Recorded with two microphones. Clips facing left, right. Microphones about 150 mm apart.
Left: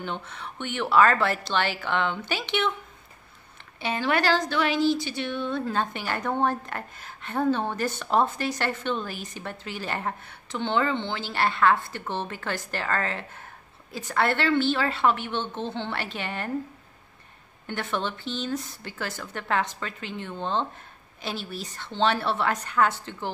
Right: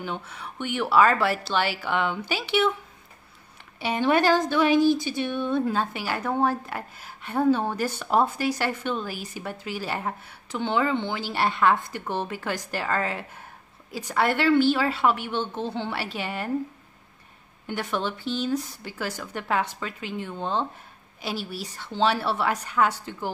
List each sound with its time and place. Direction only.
0.0 s speech: 10° right (ahead or behind)
3.8 s a woman's voice: 15° right (ahead or behind)
4.7 s speech: 50° right (ahead or behind)
5.2 s speech: 15° right (ahead or behind)
17.6 s speech: 10° right (ahead or behind)